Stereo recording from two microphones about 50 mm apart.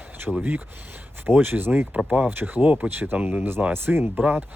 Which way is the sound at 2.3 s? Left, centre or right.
Right.